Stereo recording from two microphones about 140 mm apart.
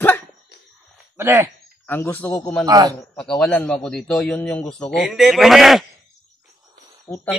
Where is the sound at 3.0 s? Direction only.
5° left (ahead or behind).